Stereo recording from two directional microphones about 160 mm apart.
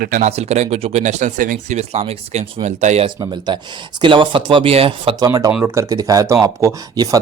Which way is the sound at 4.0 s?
30° right (ahead or behind).